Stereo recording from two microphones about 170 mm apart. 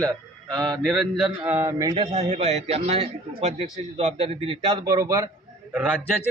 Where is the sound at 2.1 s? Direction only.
40° right (ahead or behind); by 5.2 s 20° right (ahead or behind).